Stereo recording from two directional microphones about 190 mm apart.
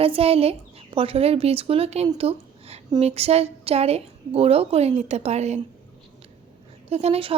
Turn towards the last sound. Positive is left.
turn(degrees=-30)  # may be behind; listen again after turning